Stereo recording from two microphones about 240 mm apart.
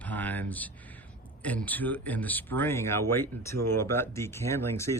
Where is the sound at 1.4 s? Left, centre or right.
Centre.